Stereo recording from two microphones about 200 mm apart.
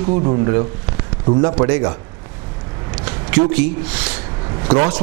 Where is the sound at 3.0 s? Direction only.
10° right (ahead or behind).